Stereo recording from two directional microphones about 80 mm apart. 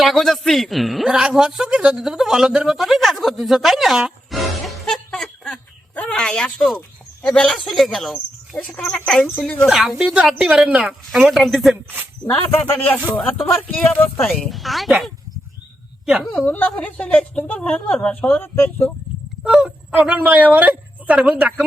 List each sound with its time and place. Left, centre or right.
0.0 s a man's voice: centre
5.1 s a sound: centre
5.9 s a man's voice: centre
8.1 s a woman's voice: centre
9.6 s a man's voice: centre
11.1 s a man's voice: centre
12.3 s speech: left
14.2 s a woman's voice: centre
14.5 s a man's voice: centre
16.5 s a woman's voice: centre
19.4 s a woman's voice: centre